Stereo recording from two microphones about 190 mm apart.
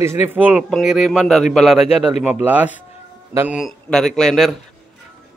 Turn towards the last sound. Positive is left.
turn(degrees=0)  # may be behind; listen again after turning